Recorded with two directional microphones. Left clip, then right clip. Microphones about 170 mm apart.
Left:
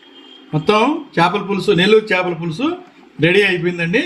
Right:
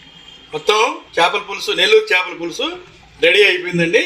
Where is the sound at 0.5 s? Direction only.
25° right (ahead or behind).